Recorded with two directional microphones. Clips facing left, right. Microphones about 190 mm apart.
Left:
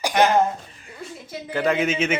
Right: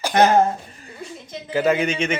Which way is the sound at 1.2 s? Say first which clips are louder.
Left 1 dB; 5° left (ahead or behind).